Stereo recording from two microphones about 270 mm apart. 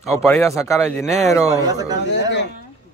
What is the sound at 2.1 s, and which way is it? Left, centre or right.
Speech, left.